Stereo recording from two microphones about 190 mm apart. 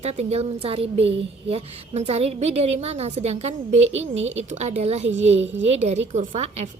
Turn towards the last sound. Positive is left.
turn(degrees=-35)  # may be behind; listen again after turning